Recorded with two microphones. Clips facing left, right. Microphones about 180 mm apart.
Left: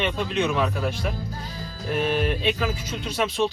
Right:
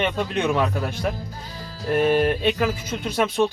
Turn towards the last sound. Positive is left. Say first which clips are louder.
# right 3 dB
turn(degrees=-50)  # may be behind; listen again after turning